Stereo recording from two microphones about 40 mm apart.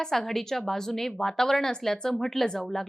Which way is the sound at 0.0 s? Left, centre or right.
Centre.